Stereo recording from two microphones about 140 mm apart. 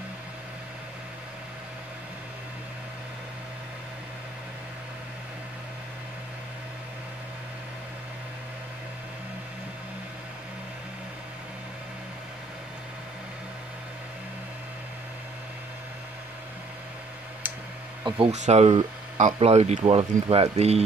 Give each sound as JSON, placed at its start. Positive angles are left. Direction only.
{"t": 18.0, "sound": "speech", "side_deg": -40}
{"t": 18.3, "sound": "speech", "side_deg": -55}